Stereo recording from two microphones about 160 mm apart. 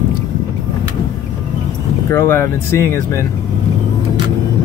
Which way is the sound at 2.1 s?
15° left (ahead or behind).